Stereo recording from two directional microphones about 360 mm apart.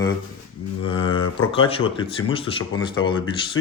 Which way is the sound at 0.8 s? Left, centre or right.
Centre.